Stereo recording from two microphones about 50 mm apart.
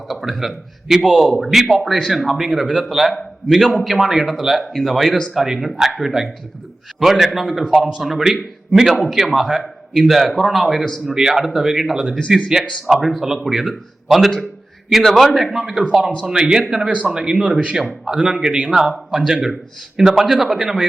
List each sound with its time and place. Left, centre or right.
0.1 s a man's voice: centre
15.5 s speech: centre
16.8 s speech: right
17.7 s speech: centre
18.7 s speech: centre